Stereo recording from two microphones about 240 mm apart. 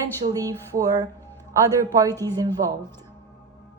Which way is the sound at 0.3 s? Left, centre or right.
Centre.